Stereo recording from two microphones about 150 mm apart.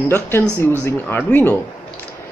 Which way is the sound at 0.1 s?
15° left (ahead or behind).